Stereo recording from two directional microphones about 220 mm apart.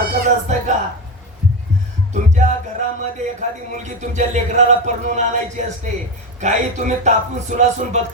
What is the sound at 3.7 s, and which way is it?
Speech, 35° right (ahead or behind).